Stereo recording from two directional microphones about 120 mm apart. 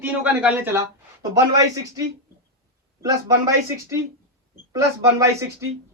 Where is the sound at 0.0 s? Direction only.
15° right (ahead or behind).